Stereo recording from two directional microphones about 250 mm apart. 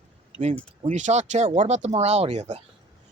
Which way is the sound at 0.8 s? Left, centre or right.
Right.